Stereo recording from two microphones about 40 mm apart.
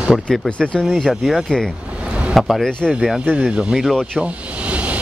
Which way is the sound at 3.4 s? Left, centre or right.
Right.